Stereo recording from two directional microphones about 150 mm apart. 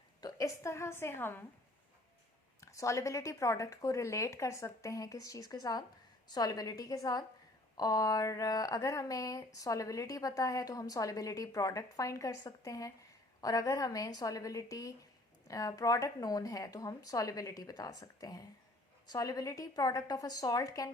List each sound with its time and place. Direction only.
0.2 s a woman's voice: 25° left (ahead or behind)
2.6 s speech: 20° left (ahead or behind)